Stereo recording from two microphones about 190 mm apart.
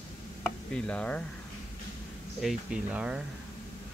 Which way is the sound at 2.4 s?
5° right (ahead or behind).